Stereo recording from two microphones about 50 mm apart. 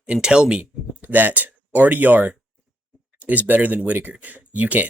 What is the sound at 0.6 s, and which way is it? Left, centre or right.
Speech, right.